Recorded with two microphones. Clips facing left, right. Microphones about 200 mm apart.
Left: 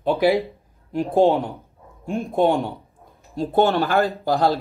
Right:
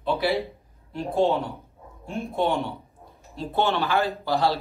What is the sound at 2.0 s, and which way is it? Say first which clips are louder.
Speech: left 6 dB; 50° left (ahead or behind).